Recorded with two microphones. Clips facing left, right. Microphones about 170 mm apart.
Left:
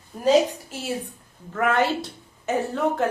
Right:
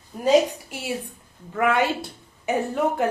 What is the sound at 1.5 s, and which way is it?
A woman's voice, 10° right (ahead or behind).